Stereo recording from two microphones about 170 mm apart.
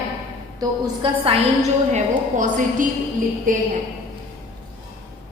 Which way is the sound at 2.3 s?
50° right (ahead or behind).